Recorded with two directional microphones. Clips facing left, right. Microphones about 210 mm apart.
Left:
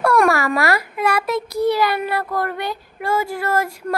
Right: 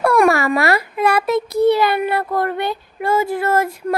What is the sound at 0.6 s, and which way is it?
A woman's voice, 25° right (ahead or behind).